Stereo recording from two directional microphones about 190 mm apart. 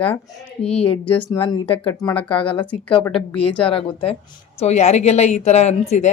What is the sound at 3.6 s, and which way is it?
A woman's voice, 30° left (ahead or behind).